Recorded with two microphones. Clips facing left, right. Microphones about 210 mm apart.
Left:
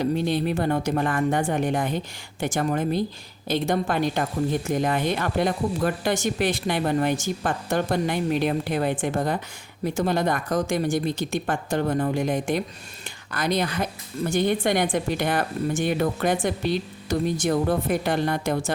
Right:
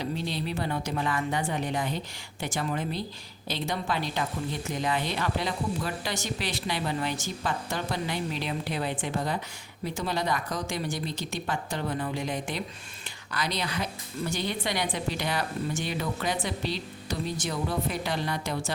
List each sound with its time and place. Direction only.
0.0 s speech: 50° left (ahead or behind)